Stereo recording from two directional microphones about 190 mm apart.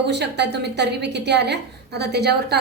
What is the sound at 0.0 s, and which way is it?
A woman's voice, 65° right (ahead or behind).